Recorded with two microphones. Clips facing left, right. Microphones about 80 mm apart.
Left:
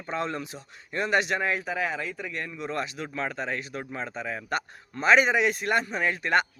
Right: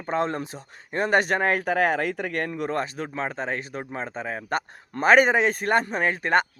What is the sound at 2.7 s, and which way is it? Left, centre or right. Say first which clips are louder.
A man's voice: right 4 dB; right.